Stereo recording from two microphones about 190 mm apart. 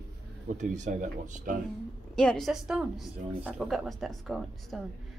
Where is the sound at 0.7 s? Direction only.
40° right (ahead or behind).